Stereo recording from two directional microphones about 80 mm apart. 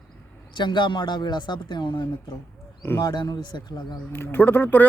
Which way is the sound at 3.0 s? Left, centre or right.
Left.